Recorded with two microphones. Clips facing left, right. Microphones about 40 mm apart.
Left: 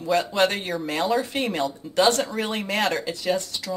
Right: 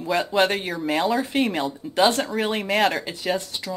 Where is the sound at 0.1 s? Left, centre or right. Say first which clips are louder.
Right 1 dB; centre.